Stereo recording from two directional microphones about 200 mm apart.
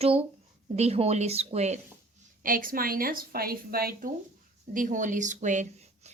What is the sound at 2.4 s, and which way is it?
A woman's voice, 45° right (ahead or behind).